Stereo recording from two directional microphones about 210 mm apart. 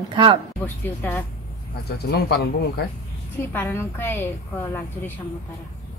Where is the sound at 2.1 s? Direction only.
50° left (ahead or behind).